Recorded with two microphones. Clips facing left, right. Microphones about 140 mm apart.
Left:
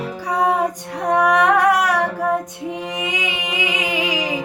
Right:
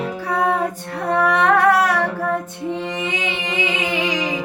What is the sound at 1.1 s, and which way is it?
Female singing, 15° left (ahead or behind).